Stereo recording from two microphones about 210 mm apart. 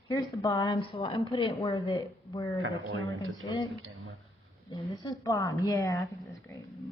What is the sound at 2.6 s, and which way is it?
Speech, 65° right (ahead or behind).